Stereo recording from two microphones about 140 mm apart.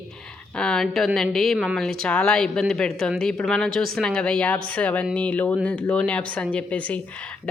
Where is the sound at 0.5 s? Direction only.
5° left (ahead or behind).